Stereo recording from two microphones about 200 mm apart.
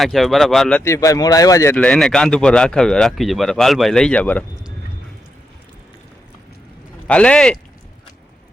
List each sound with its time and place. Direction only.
0.0 s speech: centre (ahead or behind)
0.8 s speech: 15° left (ahead or behind)
1.7 s speech: 5° left (ahead or behind)
7.1 s speech: 5° left (ahead or behind)